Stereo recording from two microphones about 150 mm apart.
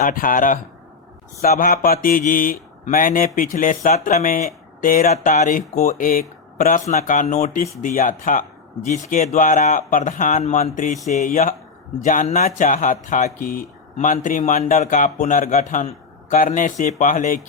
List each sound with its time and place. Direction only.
0.0 s speech: 65° left (ahead or behind)
6.8 s speech: 55° left (ahead or behind)
9.0 s speech: 50° left (ahead or behind)
11.9 s speech: 60° left (ahead or behind)